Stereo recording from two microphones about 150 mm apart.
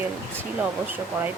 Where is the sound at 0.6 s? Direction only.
10° right (ahead or behind).